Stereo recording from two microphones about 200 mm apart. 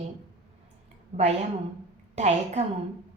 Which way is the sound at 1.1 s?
40° right (ahead or behind).